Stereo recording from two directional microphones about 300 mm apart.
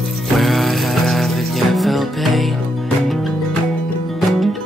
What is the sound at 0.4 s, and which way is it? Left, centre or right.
Music, centre.